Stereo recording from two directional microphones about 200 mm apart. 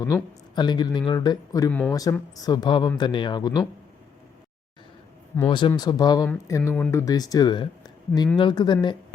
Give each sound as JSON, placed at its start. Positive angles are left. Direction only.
{"t": 0.0, "sound": "speech", "side_deg": 20}
{"t": 5.5, "sound": "speech", "side_deg": 25}